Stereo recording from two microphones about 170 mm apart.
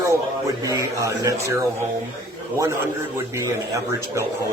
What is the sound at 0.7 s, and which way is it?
Speech, 20° right (ahead or behind).